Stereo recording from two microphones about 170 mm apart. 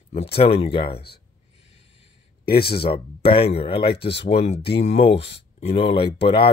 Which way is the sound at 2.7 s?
30° left (ahead or behind).